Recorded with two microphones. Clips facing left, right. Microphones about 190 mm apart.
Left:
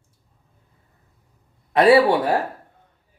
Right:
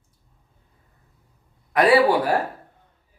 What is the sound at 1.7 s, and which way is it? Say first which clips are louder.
Speech: left 2 dB; 25° left (ahead or behind).